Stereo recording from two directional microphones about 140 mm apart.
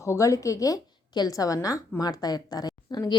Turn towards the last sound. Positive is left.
turn(degrees=25)  # may be behind; listen again after turning